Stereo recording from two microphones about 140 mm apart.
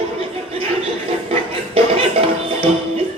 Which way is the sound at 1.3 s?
45° right (ahead or behind).